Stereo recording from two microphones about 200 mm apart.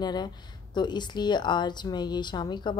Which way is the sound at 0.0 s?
20° left (ahead or behind).